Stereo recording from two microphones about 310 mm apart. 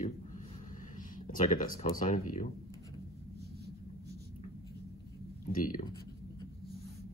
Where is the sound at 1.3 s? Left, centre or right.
Left.